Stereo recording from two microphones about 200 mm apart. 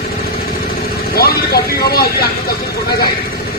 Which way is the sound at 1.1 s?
50° left (ahead or behind).